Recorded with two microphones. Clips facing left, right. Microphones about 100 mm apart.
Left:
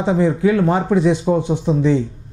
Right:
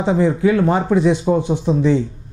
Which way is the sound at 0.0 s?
20° right (ahead or behind).